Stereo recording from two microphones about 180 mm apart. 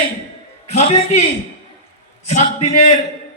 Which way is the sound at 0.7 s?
40° left (ahead or behind).